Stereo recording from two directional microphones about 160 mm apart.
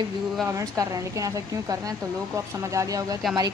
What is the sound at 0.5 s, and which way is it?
Speech, 20° right (ahead or behind).